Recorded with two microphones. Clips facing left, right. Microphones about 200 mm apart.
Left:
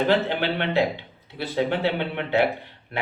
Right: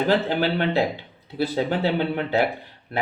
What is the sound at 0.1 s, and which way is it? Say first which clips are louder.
A man's voice: right 1 dB; 40° right (ahead or behind).